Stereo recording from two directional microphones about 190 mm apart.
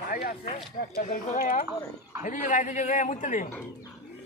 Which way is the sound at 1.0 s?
40° left (ahead or behind).